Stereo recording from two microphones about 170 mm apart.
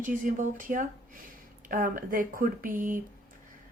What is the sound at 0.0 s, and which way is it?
Speech, 50° right (ahead or behind).